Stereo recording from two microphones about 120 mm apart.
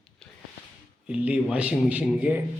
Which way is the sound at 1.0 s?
10° right (ahead or behind).